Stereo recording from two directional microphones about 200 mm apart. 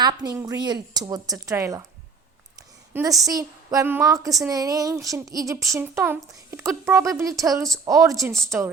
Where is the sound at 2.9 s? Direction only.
15° right (ahead or behind).